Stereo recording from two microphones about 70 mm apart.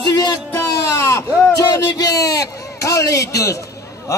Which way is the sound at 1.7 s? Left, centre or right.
Left.